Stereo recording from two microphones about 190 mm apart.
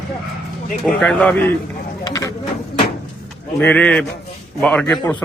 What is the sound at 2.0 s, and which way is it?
Vehicle, 20° left (ahead or behind).